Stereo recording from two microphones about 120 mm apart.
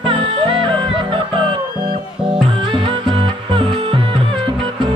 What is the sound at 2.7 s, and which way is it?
Music, 45° right (ahead or behind).